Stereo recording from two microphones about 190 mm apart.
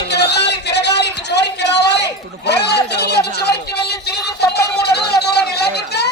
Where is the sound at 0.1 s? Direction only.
60° left (ahead or behind).